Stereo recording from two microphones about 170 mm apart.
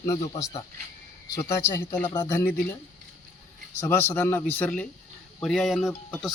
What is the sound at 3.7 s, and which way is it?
Speech, 15° left (ahead or behind).